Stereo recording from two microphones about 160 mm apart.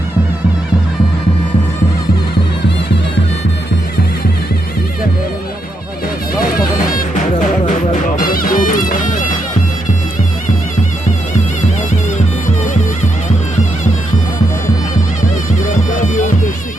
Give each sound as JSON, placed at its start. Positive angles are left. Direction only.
{"t": 8.2, "sound": "music", "side_deg": 65}
{"t": 15.7, "sound": "music", "side_deg": 55}